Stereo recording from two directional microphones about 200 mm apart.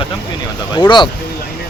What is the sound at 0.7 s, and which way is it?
Speech, 20° left (ahead or behind).